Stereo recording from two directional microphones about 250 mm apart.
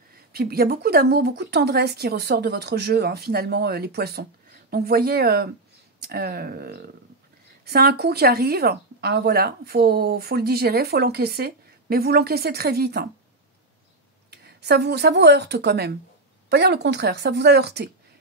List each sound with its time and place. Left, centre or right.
0.1 s a woman's voice: right
14.3 s a woman's voice: right